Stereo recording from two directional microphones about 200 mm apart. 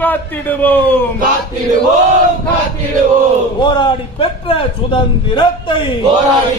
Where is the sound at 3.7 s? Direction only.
25° left (ahead or behind).